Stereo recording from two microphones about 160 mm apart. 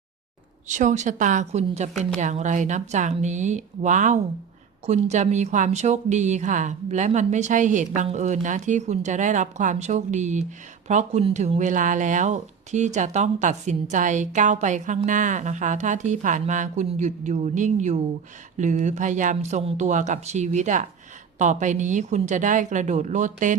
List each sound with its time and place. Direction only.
0.7 s speech: 50° right (ahead or behind)